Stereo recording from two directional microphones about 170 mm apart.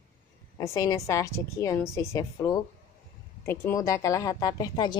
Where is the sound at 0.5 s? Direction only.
20° left (ahead or behind).